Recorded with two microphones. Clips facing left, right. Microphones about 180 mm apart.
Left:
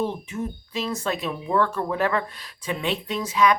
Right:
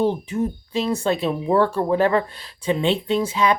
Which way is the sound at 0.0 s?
30° right (ahead or behind).